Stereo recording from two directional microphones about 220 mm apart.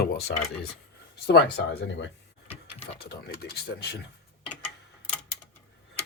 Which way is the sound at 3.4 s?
50° left (ahead or behind).